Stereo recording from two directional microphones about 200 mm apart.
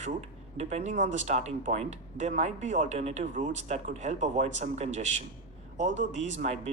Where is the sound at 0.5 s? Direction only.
35° right (ahead or behind).